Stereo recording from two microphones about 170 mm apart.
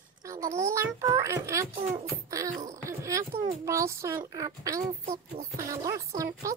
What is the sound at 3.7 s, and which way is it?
Speech, 20° right (ahead or behind).